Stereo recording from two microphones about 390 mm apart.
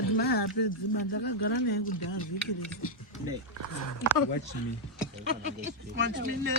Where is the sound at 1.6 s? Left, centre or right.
Left.